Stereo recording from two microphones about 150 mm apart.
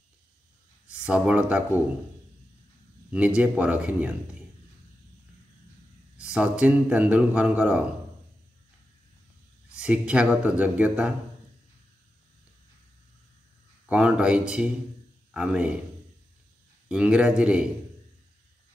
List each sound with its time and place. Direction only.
0.8 s speech: 5° right (ahead or behind)
3.1 s a man's voice: 10° right (ahead or behind)
6.1 s a man's voice: 5° right (ahead or behind)
9.8 s a man's voice: 5° right (ahead or behind)
13.8 s a man's voice: 5° right (ahead or behind)
16.9 s a man's voice: 5° right (ahead or behind)